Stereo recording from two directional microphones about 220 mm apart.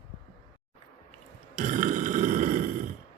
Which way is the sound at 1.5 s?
40° right (ahead or behind).